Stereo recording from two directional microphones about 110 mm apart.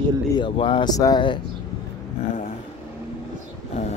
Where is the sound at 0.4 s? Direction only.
45° left (ahead or behind).